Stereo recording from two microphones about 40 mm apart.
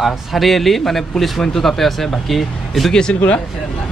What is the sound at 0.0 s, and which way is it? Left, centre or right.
Speech, centre.